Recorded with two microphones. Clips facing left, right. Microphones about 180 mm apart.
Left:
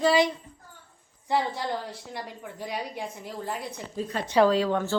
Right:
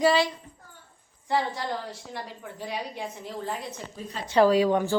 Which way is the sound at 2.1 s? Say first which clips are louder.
Even; 10° left (ahead or behind).